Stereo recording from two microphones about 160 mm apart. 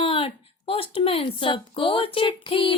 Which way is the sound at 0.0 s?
35° left (ahead or behind).